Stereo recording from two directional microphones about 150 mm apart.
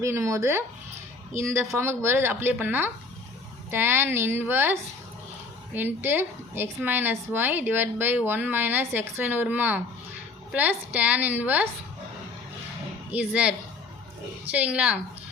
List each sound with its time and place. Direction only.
0.0 s a woman's voice: 20° right (ahead or behind)
13.1 s a woman's voice: 10° right (ahead or behind)